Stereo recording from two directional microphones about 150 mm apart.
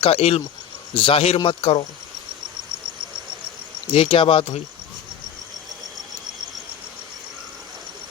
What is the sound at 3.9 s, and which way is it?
Speech, 35° left (ahead or behind).